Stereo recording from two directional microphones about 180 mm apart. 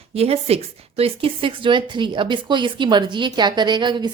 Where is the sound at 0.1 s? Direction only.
35° right (ahead or behind).